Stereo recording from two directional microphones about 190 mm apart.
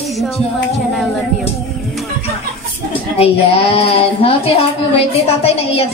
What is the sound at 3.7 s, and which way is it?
Speech, 30° left (ahead or behind).